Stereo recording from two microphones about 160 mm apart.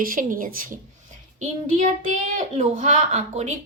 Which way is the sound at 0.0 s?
60° right (ahead or behind).